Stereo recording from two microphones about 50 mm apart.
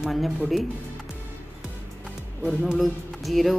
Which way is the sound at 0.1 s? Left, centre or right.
Centre.